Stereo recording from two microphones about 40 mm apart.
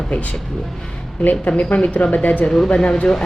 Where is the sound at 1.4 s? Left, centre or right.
Left.